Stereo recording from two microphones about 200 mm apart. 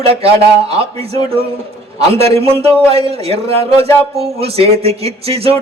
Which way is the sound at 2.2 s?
30° right (ahead or behind).